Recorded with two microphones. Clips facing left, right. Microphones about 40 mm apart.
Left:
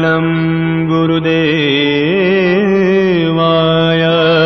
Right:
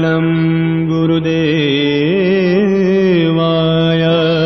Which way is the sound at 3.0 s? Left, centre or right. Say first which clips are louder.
Even; centre.